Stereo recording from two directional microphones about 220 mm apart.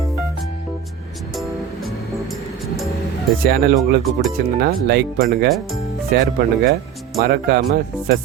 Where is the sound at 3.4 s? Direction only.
45° right (ahead or behind).